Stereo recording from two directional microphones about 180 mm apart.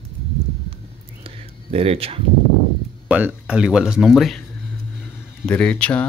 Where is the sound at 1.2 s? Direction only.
35° right (ahead or behind).